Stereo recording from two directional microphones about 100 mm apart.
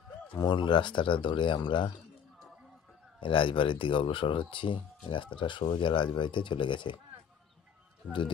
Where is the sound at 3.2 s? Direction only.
55° left (ahead or behind).